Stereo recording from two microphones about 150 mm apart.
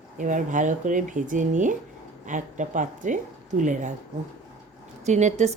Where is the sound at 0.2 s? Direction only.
60° right (ahead or behind).